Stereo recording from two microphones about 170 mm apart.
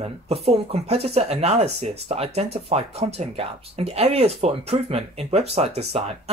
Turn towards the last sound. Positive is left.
turn(degrees=-40)  # may be behind; listen again after turning